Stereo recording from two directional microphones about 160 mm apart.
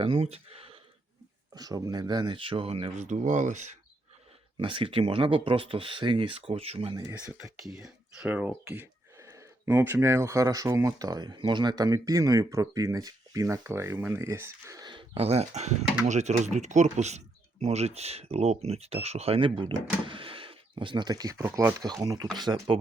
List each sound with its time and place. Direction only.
0.0 s speech: 35° right (ahead or behind)
1.5 s speech: 25° right (ahead or behind)
3.1 s speech: 50° right (ahead or behind)
4.5 s speech: 35° right (ahead or behind)
7.1 s speech: 15° right (ahead or behind)
7.6 s speech: 5° right (ahead or behind); by 22.8 s 25° right (ahead or behind)